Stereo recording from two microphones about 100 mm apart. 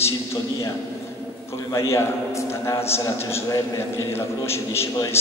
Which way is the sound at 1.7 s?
30° left (ahead or behind).